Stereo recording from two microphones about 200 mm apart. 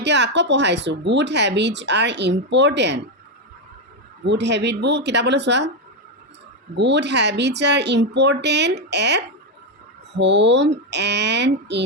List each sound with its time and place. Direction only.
0.0 s speech: 60° right (ahead or behind)
4.3 s speech: 60° right (ahead or behind)
6.7 s speech: 60° right (ahead or behind)